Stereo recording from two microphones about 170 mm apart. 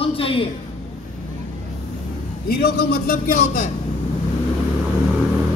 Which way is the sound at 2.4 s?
65° left (ahead or behind).